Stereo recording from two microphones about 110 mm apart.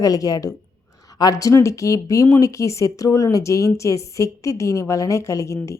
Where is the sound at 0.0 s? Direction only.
35° left (ahead or behind).